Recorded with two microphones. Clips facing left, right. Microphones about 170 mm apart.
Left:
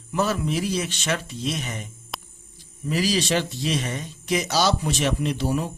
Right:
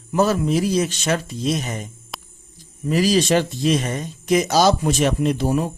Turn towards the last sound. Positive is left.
turn(degrees=-45)  # may be behind; listen again after turning